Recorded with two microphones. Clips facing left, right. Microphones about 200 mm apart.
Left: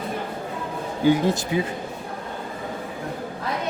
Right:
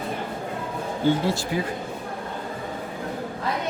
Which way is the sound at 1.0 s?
15° left (ahead or behind).